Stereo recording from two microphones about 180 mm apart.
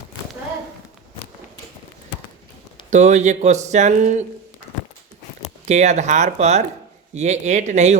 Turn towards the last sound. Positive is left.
turn(degrees=-40)  # may be behind; listen again after turning